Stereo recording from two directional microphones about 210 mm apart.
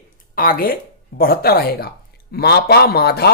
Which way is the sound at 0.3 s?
45° left (ahead or behind).